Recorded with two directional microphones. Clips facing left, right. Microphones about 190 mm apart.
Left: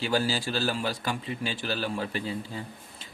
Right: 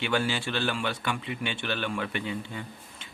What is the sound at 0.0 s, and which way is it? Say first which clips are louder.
A man's voice: left 1 dB; 35° left (ahead or behind).